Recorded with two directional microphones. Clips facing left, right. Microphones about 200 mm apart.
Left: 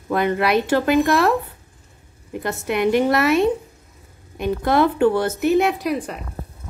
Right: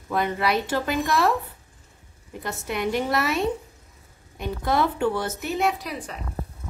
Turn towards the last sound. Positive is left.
turn(degrees=55)  # may be behind; listen again after turning